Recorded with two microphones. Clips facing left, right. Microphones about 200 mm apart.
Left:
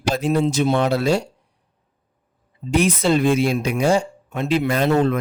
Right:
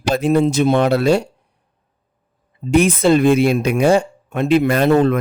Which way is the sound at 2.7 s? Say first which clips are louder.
Right 5 dB; 55° right (ahead or behind).